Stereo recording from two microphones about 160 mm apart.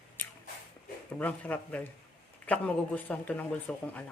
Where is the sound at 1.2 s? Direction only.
10° left (ahead or behind).